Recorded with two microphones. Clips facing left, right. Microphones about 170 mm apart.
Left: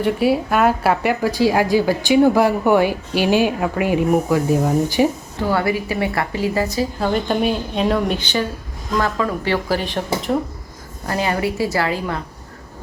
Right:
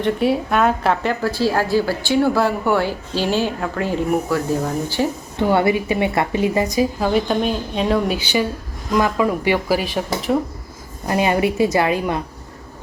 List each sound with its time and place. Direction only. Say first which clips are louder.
0.0 s speech: left 1 dB; 5° left (ahead or behind)
5.4 s a woman's voice: right 3 dB; 20° right (ahead or behind)
7.1 s speech: even; centre (ahead or behind)
11.0 s a woman's voice: right 3 dB; 15° right (ahead or behind)